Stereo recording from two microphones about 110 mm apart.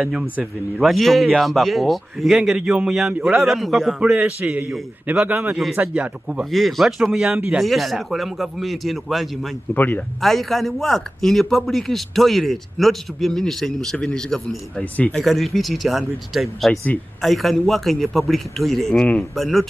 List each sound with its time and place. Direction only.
0.0 s speech: 5° right (ahead or behind)
4.2 s a man's voice: 15° right (ahead or behind)
6.5 s speech: centre (ahead or behind)
9.8 s speech: 15° left (ahead or behind)
10.2 s speech: centre (ahead or behind)
15.1 s speech: centre (ahead or behind)